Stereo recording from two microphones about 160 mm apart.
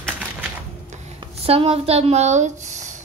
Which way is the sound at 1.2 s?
35° right (ahead or behind).